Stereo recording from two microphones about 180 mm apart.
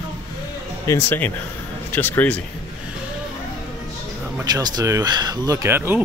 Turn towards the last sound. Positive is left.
turn(degrees=-10)  # may be behind; listen again after turning